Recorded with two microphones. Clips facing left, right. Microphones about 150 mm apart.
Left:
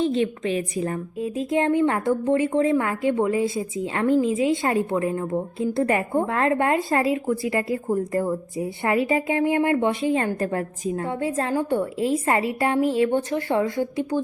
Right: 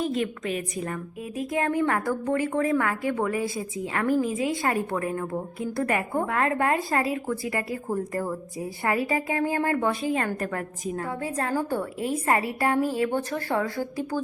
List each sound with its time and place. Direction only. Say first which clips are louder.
0.0 s a woman's voice: left 5 dB; 30° left (ahead or behind)